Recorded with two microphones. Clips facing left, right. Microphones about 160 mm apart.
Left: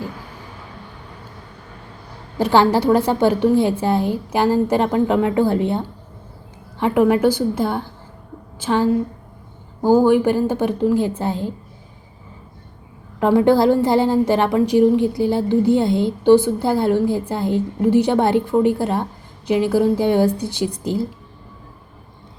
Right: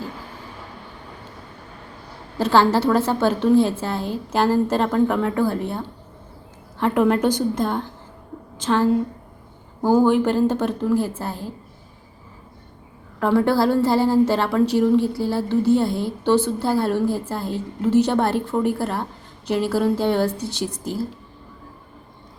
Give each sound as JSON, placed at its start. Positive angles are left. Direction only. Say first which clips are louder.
{"t": 2.4, "sound": "a woman's voice", "louder": "left 2 dB", "side_deg": 15}
{"t": 13.1, "sound": "a woman's voice", "louder": "left 4 dB", "side_deg": 15}